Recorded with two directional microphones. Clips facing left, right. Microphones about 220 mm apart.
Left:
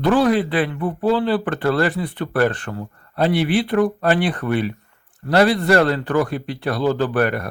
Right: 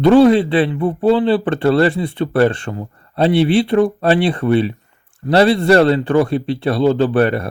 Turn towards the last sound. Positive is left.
turn(degrees=-25)  # may be behind; listen again after turning